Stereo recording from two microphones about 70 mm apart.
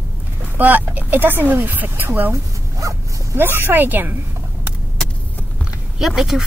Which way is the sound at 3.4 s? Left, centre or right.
Right.